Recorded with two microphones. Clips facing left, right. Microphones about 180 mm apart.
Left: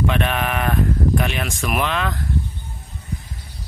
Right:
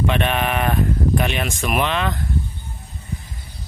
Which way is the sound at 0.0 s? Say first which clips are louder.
Right 1 dB; centre (ahead or behind).